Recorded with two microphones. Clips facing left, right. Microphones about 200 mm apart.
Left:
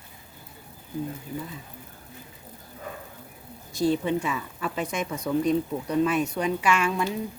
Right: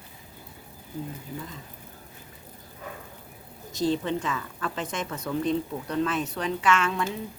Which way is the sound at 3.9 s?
10° left (ahead or behind).